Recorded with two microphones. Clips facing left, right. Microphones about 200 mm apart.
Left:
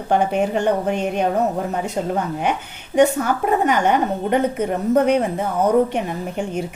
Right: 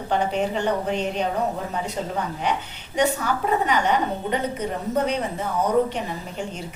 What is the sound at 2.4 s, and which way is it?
A woman's voice, 50° left (ahead or behind).